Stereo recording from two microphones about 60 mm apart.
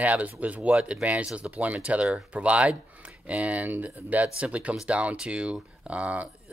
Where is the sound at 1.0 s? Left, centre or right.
Right.